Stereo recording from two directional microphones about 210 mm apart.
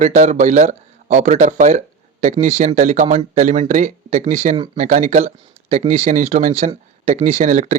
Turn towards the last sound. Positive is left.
turn(degrees=-35)  # may be behind; listen again after turning